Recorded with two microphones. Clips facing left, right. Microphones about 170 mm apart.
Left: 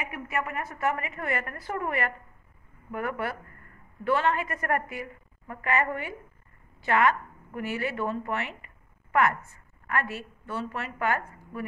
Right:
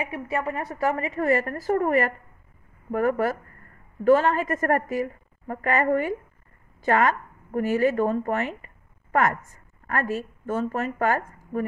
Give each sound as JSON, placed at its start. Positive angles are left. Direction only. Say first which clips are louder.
{"t": 0.0, "sound": "a woman's voice", "louder": "right 5 dB", "side_deg": -30}